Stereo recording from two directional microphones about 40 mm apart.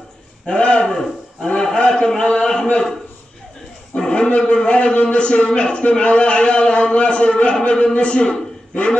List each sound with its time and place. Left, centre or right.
0.6 s a man's voice: left
0.8 s a man's voice: centre
3.9 s a man's voice: left